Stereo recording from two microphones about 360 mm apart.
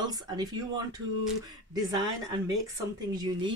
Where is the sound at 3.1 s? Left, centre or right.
Centre.